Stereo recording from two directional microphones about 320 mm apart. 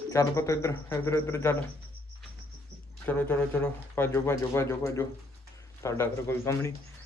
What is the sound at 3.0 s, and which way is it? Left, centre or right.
A man's voice, centre.